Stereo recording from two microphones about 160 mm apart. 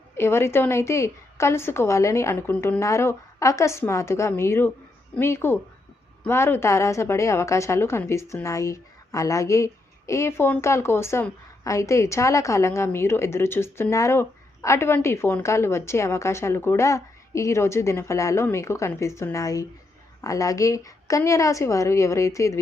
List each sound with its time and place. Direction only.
0.2 s a woman's voice: 15° left (ahead or behind)